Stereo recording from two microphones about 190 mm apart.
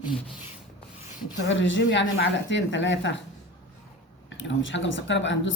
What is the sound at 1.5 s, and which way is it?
Speech, 75° left (ahead or behind).